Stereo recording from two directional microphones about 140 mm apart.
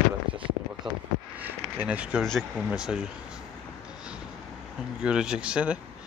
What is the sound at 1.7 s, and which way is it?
Speech, 10° right (ahead or behind).